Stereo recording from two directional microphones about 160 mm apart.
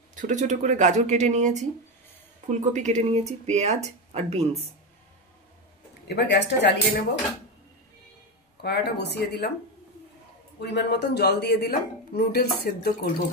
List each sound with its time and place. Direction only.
0.1 s speech: 50° right (ahead or behind)
6.0 s speech: 90° left
8.5 s speech: 90° left
10.6 s speech: 90° left